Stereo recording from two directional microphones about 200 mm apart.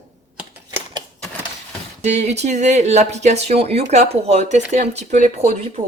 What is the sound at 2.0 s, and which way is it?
Speech, 35° right (ahead or behind).